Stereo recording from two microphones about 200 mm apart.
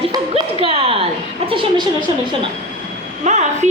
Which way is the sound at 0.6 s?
30° right (ahead or behind).